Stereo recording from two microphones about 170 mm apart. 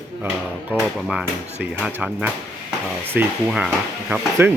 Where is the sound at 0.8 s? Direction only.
5° right (ahead or behind).